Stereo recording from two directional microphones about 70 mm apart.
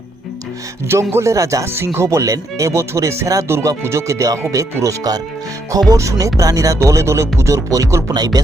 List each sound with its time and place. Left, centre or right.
0.9 s music: right
1.6 s music: right
3.5 s speech: right
3.8 s music: right
8.0 s speech: right